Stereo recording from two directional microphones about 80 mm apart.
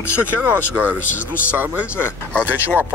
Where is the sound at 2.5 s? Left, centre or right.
Right.